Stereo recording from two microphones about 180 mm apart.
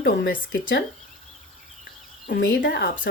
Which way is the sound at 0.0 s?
50° left (ahead or behind).